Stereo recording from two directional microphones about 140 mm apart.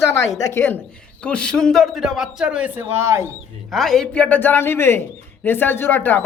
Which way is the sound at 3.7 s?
Centre (ahead or behind).